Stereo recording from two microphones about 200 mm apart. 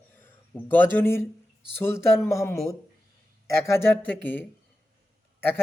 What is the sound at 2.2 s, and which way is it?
Speech, 15° left (ahead or behind).